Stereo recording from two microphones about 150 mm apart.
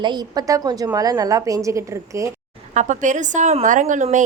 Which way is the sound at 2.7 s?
55° right (ahead or behind).